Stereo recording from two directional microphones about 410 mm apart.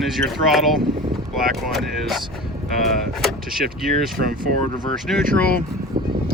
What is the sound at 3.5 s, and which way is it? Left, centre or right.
Speech, centre.